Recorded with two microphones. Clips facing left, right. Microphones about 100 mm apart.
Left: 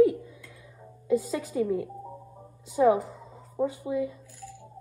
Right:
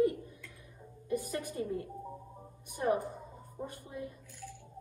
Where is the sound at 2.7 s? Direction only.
90° left.